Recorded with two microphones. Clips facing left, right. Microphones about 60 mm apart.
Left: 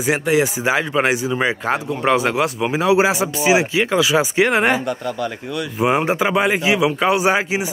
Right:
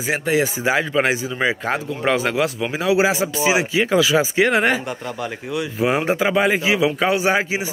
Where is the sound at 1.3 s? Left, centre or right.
Centre.